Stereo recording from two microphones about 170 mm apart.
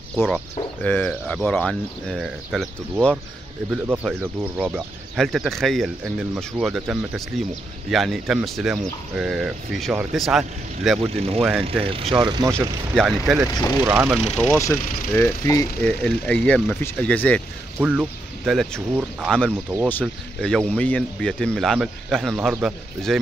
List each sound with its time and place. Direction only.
0.8 s speech: 5° left (ahead or behind)
3.7 s speech: 5° right (ahead or behind)
11.0 s speech: 35° right (ahead or behind)
12.9 s speech: 5° right (ahead or behind)
13.5 s speech: 20° left (ahead or behind)
13.8 s speech: 15° right (ahead or behind)
14.5 s speech: 15° left (ahead or behind)
14.8 s speech: 55° left (ahead or behind)
15.1 s speech: 15° left (ahead or behind); by 23.1 s centre (ahead or behind)